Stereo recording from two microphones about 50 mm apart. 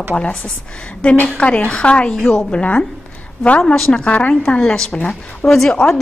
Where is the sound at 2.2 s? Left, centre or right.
Centre.